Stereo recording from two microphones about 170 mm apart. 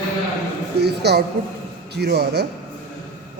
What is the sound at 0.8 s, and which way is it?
A man's voice, 75° right (ahead or behind).